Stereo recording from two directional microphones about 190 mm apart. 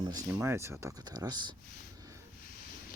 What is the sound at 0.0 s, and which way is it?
Speech, 20° right (ahead or behind).